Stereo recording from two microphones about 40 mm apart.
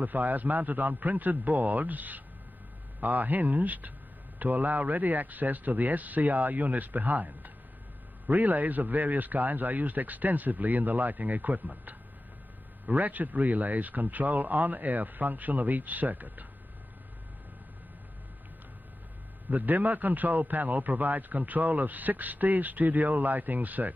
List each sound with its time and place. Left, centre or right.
0.0 s a man's voice: right
12.8 s a man's voice: right
19.5 s a man's voice: right